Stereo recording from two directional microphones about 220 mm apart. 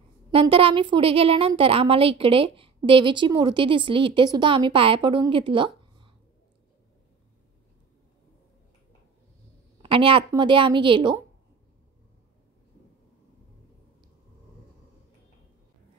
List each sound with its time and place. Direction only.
0.3 s a woman's voice: 25° right (ahead or behind)
9.8 s a woman's voice: 25° right (ahead or behind)